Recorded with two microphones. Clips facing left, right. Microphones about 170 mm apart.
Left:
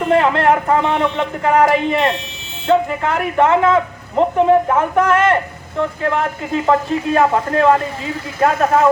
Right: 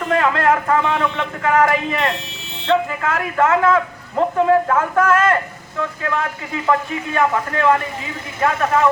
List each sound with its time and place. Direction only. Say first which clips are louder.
0.0 s a woman's voice: left 3 dB; 30° left (ahead or behind)